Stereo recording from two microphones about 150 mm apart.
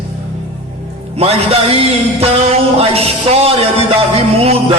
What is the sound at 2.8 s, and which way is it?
A man's voice, 40° right (ahead or behind).